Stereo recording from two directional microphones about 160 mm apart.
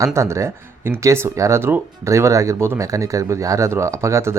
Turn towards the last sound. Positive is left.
turn(degrees=-15)  # may be behind; listen again after turning